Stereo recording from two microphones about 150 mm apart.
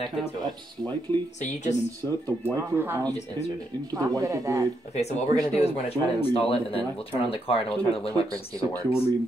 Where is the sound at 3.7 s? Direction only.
15° left (ahead or behind).